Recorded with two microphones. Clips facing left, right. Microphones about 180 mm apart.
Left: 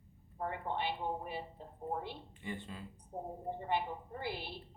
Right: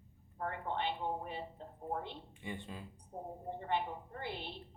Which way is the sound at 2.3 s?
15° right (ahead or behind).